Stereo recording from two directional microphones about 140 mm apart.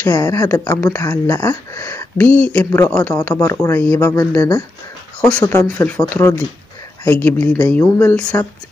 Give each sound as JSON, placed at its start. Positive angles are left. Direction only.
{"t": 0.0, "sound": "speech", "side_deg": 20}